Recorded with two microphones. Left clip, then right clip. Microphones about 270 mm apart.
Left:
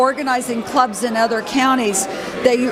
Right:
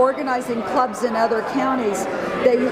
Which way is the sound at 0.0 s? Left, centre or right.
Left.